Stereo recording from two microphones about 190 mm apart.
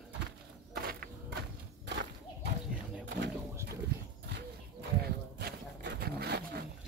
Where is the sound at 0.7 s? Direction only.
55° right (ahead or behind).